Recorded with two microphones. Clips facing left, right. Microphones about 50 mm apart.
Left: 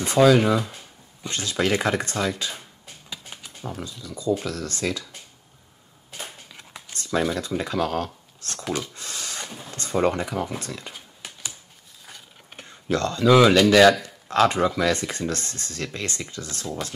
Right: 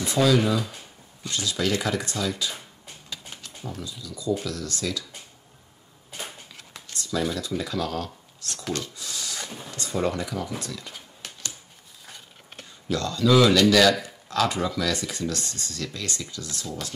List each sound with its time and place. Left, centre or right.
0.0 s speech: left
1.3 s speech: left
3.1 s typing: centre
4.0 s speech: left
6.9 s a sound: left
7.3 s speech: left
8.4 s a sound: left
8.6 s speech: centre
8.9 s a sound: left
9.8 s speech: left
10.9 s typing: centre
12.6 s speech: left